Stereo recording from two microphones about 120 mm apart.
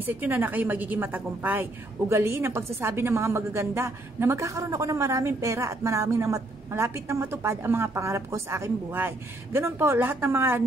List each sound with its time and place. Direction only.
0.0 s a woman's voice: 15° right (ahead or behind)